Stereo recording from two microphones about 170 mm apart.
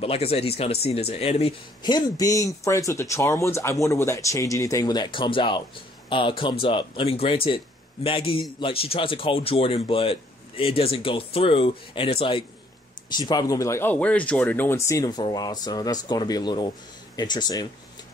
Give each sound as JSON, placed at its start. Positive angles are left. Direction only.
{"t": 0.0, "sound": "speech", "side_deg": 35}
{"t": 1.8, "sound": "speech", "side_deg": 25}